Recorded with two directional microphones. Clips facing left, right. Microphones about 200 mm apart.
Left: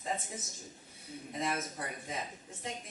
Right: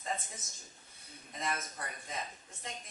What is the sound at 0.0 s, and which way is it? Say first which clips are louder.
A woman's voice: left 2 dB; 5° left (ahead or behind).